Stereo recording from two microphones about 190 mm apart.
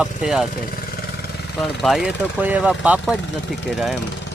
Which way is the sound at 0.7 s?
50° left (ahead or behind).